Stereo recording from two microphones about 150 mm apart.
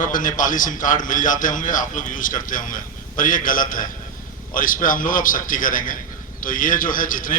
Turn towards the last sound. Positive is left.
turn(degrees=65)  # may be behind; listen again after turning